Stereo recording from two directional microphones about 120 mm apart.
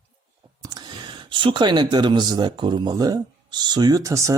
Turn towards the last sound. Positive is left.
turn(degrees=-30)  # may be behind; listen again after turning